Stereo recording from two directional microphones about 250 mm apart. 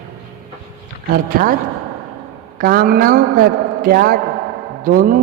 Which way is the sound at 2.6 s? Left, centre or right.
Right.